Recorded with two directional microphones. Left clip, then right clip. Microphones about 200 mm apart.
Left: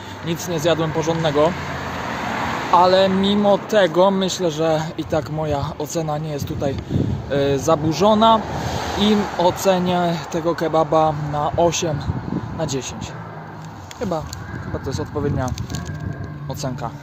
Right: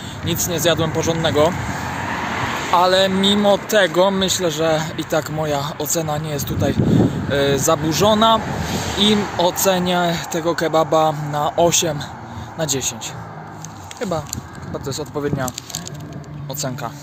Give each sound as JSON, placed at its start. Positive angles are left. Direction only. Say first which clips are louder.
{"t": 0.3, "sound": "speech", "louder": "right 1 dB", "side_deg": 0}
{"t": 1.5, "sound": "vehicle", "louder": "right 2 dB", "side_deg": 50}
{"t": 2.7, "sound": "speech", "louder": "left 1 dB", "side_deg": 0}
{"t": 9.1, "sound": "speech", "louder": "even", "side_deg": 55}
{"t": 9.6, "sound": "speech", "louder": "right 1 dB", "side_deg": 5}
{"t": 14.0, "sound": "speech", "louder": "right 1 dB", "side_deg": 10}
{"t": 16.6, "sound": "speech", "louder": "right 2 dB", "side_deg": 5}